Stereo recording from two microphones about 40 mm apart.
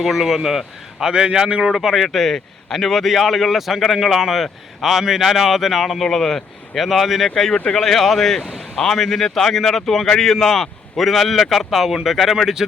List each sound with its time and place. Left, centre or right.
0.0 s a man's voice: centre; by 1.7 s right
1.7 s a man's voice: centre
2.0 s a man's voice: centre
6.1 s a man's voice: centre